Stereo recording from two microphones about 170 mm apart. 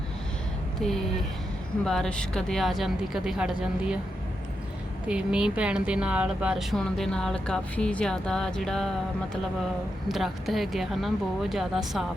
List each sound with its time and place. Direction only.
0.8 s speech: centre (ahead or behind)
5.0 s speech: 5° right (ahead or behind)
10.1 s speech: centre (ahead or behind)